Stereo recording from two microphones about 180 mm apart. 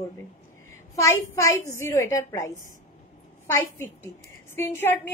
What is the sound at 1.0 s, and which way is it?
A woman's voice, 15° left (ahead or behind).